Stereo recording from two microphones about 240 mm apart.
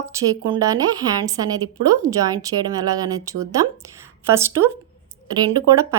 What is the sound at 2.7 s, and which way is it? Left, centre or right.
A woman's voice, centre.